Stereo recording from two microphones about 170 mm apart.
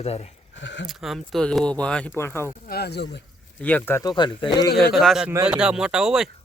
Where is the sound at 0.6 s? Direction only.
90° left.